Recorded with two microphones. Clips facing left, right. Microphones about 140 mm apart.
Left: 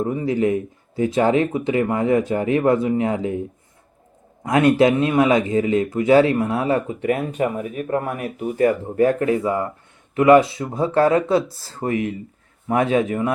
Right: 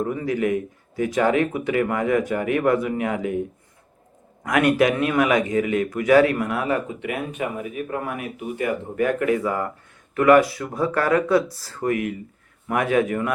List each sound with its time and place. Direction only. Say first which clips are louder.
0.0 s speech: left 3 dB; 25° left (ahead or behind)
4.4 s speech: left 3 dB; 25° left (ahead or behind)